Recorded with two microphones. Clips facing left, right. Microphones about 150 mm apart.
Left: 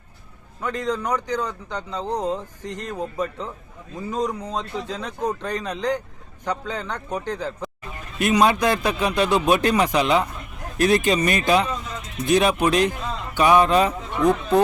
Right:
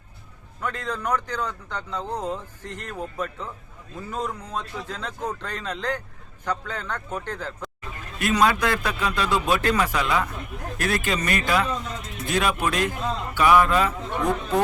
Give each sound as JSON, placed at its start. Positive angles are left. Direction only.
{"t": 0.6, "sound": "a man's voice", "side_deg": 15}